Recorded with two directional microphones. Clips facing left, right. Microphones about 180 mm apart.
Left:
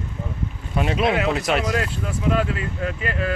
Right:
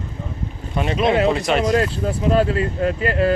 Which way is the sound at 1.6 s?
35° right (ahead or behind).